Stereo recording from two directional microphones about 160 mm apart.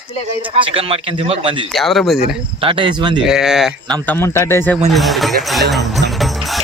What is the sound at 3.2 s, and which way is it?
Speech, 5° right (ahead or behind).